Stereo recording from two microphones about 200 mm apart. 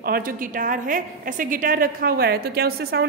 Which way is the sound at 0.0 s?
45° right (ahead or behind).